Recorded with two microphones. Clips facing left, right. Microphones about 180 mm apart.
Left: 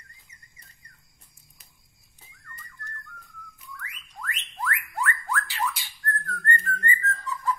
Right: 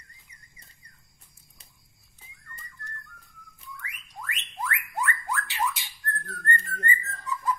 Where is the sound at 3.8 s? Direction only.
15° right (ahead or behind).